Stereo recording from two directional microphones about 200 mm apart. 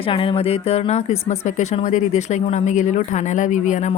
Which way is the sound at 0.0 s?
25° left (ahead or behind).